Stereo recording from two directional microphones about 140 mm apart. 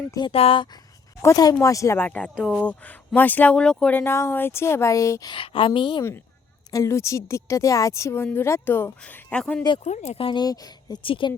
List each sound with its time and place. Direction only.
0.3 s speech: 40° left (ahead or behind)
1.2 s a woman's voice: 25° left (ahead or behind)
5.3 s speech: 40° left (ahead or behind)
6.7 s a woman's voice: 20° left (ahead or behind); by 9.6 s 5° left (ahead or behind)
9.8 s speech: 55° left (ahead or behind); by 11.3 s 35° left (ahead or behind)